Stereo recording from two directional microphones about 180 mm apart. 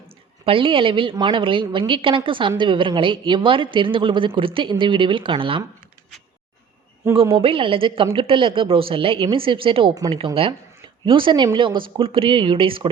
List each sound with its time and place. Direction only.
0.4 s a woman's voice: 30° right (ahead or behind)
7.2 s a woman's voice: 30° right (ahead or behind)